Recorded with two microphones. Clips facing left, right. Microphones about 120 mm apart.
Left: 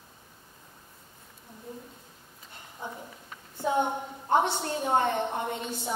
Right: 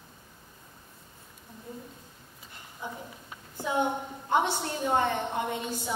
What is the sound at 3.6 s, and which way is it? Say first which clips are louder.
A woman's voice: left 1 dB; 40° left (ahead or behind).